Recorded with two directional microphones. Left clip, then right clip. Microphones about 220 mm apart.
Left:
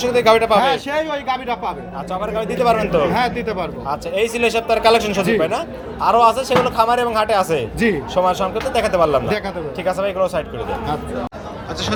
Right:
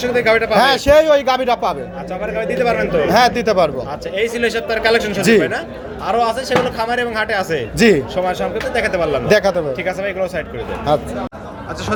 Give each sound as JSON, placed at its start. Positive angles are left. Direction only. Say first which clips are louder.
{"t": 0.0, "sound": "speech", "louder": "left 1 dB", "side_deg": 20}
{"t": 0.6, "sound": "speech", "louder": "right 7 dB", "side_deg": -40}
{"t": 2.2, "sound": "speech", "louder": "even", "side_deg": 20}
{"t": 3.1, "sound": "speech", "louder": "right 6 dB", "side_deg": -40}
{"t": 3.8, "sound": "a man's voice", "louder": "even", "side_deg": 20}
{"t": 7.8, "sound": "speech", "louder": "right 10 dB", "side_deg": -40}
{"t": 8.1, "sound": "a man's voice", "louder": "left 1 dB", "side_deg": 15}
{"t": 9.3, "sound": "speech", "louder": "right 9 dB", "side_deg": -35}
{"t": 9.8, "sound": "a man's voice", "louder": "left 1 dB", "side_deg": 15}